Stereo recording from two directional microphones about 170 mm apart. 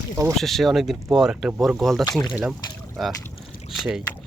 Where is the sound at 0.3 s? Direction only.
Centre (ahead or behind).